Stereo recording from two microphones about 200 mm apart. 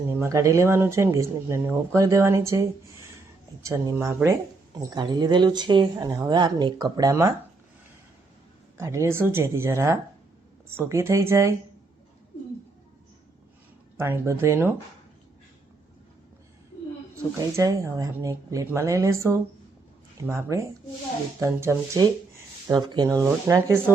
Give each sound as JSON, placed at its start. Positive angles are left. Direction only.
{"t": 0.1, "sound": "speech", "side_deg": -15}
{"t": 8.8, "sound": "speech", "side_deg": -15}
{"t": 13.9, "sound": "speech", "side_deg": -10}
{"t": 17.6, "sound": "speech", "side_deg": -15}